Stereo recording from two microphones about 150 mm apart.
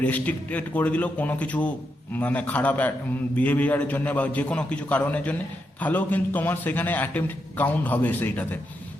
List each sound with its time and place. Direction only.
0.0 s a man's voice: 10° left (ahead or behind)